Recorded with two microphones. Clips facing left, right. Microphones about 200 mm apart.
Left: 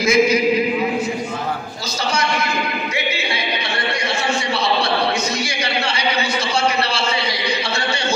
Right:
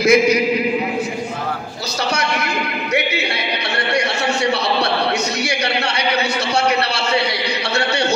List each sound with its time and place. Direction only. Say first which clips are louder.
0.0 s a man's voice: right 2 dB; 65° right (ahead or behind)
2.9 s music: right 3 dB; 65° right (ahead or behind)
5.5 s a sound: right 2 dB; 65° right (ahead or behind)